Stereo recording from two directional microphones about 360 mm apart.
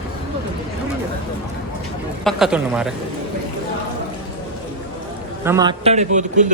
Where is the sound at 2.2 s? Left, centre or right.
Centre.